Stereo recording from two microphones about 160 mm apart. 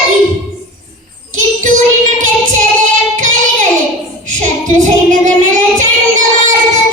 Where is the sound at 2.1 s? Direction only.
55° right (ahead or behind).